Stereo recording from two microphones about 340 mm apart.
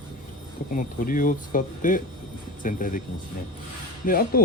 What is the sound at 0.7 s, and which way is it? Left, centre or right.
Speech, left.